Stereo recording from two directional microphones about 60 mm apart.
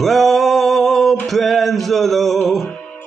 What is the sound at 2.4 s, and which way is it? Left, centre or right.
Music, centre.